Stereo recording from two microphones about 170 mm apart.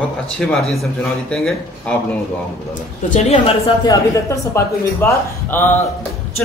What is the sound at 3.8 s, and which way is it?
A man's voice, 20° left (ahead or behind).